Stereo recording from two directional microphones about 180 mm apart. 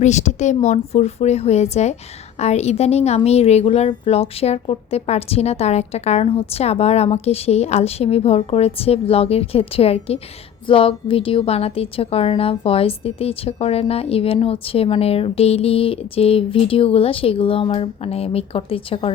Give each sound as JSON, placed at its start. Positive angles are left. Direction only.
{"t": 0.0, "sound": "a woman's voice", "side_deg": 40}